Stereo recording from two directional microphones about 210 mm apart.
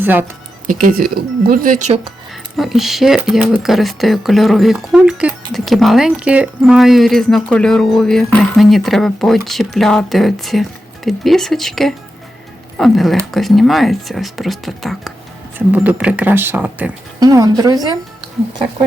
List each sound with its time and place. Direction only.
0.0 s speech: 10° right (ahead or behind)
0.7 s speech: 40° right (ahead or behind)
2.3 s speech: centre (ahead or behind)
17.2 s speech: 15° right (ahead or behind)